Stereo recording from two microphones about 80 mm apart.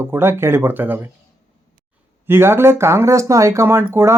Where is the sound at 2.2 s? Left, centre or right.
Right.